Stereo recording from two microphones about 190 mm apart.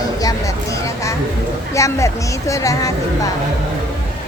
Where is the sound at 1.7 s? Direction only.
15° left (ahead or behind).